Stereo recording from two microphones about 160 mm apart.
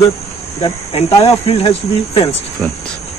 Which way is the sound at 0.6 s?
40° left (ahead or behind).